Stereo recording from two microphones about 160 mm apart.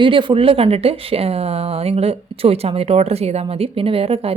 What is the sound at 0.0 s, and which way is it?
A woman's voice, 30° right (ahead or behind).